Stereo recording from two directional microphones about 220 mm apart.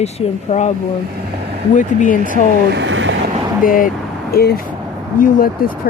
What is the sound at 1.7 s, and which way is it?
Speech, 35° left (ahead or behind).